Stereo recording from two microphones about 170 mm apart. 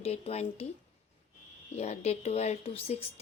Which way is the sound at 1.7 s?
40° left (ahead or behind).